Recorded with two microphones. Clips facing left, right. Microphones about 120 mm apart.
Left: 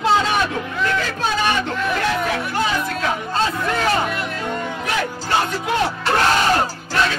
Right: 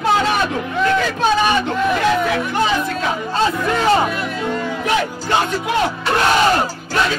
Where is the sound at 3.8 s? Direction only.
25° right (ahead or behind).